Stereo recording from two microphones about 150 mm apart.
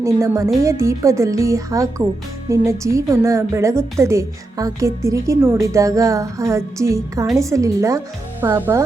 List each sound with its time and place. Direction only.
0.0 s a woman's voice: 20° right (ahead or behind)